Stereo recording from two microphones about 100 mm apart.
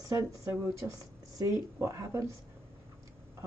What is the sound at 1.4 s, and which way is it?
Speech, 35° right (ahead or behind).